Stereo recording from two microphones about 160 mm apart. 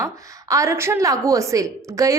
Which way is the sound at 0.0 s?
20° right (ahead or behind).